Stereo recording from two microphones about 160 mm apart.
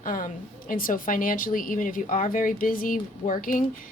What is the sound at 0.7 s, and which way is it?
A woman's voice, 60° left (ahead or behind).